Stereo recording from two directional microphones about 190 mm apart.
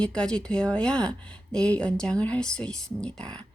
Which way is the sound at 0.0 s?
5° left (ahead or behind).